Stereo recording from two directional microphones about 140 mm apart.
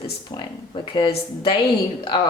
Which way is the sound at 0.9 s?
35° left (ahead or behind).